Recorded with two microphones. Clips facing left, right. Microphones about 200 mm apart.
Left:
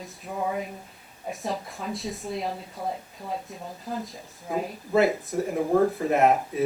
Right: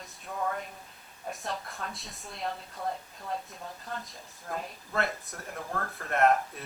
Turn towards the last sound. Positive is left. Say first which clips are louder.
# left 4 dB
turn(degrees=0)  # may be behind; listen again after turning